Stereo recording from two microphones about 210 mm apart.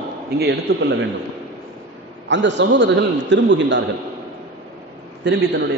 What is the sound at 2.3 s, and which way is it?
A man's voice, 60° right (ahead or behind).